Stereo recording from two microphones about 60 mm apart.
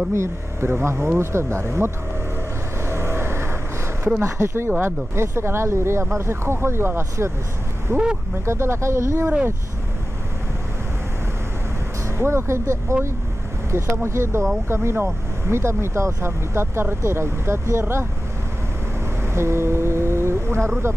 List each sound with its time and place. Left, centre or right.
0.1 s speech: right
2.8 s vehicle: right
4.2 s speech: right
12.2 s speech: right
19.3 s speech: right